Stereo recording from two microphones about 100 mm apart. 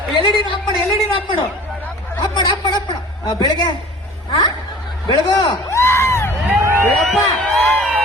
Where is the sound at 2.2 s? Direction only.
45° left (ahead or behind).